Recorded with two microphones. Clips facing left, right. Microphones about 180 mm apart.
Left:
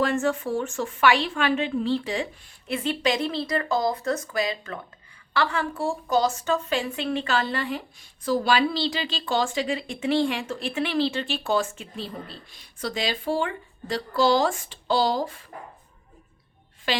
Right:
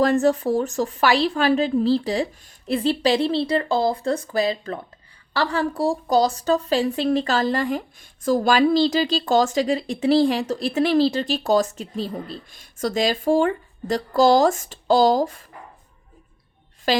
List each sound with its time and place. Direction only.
0.0 s a woman's voice: 40° right (ahead or behind)
16.9 s a woman's voice: 40° right (ahead or behind)